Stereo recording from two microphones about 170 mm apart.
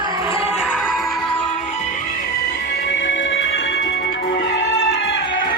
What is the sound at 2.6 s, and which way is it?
Music, 85° left.